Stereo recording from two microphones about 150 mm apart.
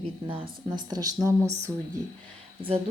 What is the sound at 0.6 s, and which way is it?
Speech, 25° right (ahead or behind).